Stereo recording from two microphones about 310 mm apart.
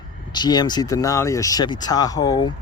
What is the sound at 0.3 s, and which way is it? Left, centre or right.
A man's voice, centre.